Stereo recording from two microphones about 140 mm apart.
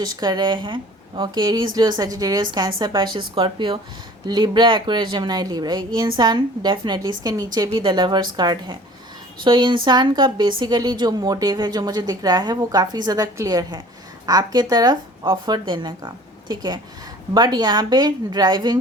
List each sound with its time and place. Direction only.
0.0 s a woman's voice: 30° right (ahead or behind)